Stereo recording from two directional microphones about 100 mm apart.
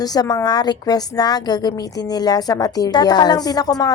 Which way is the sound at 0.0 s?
40° left (ahead or behind).